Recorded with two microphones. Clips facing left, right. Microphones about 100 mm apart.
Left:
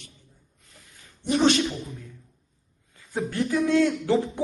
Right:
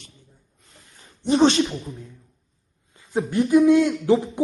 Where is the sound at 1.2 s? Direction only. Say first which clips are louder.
Right 4 dB; 30° right (ahead or behind).